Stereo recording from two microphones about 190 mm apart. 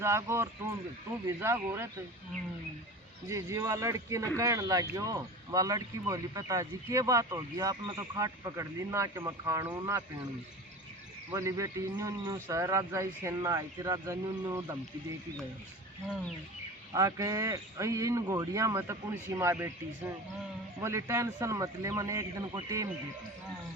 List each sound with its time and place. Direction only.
0.0 s speech: 15° right (ahead or behind)
3.2 s speech: 15° right (ahead or behind)
11.3 s speech: 15° right (ahead or behind)
16.9 s speech: 15° right (ahead or behind)
20.8 s speech: 15° right (ahead or behind)